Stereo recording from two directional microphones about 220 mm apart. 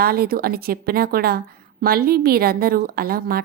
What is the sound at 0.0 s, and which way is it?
A woman's voice, 45° right (ahead or behind).